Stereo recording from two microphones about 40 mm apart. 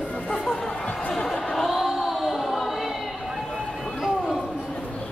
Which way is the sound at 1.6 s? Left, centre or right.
Centre.